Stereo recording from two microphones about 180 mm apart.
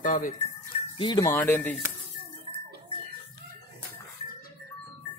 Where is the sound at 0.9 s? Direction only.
25° left (ahead or behind).